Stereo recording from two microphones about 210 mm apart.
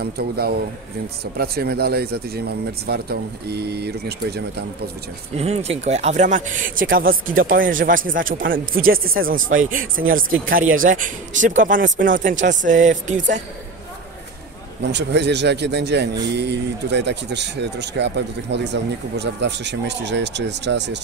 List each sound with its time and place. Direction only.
0.0 s speech: 45° right (ahead or behind)
5.3 s speech: 30° right (ahead or behind)
14.8 s speech: 55° right (ahead or behind)